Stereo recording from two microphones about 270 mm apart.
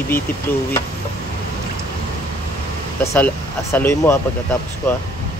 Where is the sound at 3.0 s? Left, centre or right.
Centre.